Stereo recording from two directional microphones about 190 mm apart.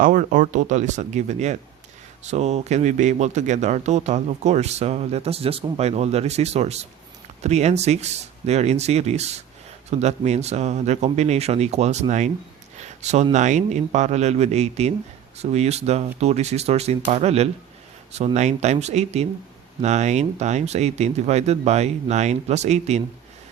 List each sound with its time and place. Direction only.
0.0 s speech: 45° right (ahead or behind)
12.7 s a sound: 35° right (ahead or behind)
13.3 s speech: 40° right (ahead or behind)